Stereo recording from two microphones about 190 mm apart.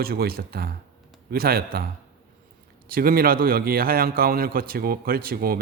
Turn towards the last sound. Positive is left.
turn(degrees=-50)  # may be behind; listen again after turning